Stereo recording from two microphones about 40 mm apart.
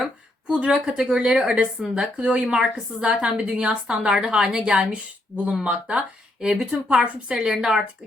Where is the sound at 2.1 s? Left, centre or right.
Right.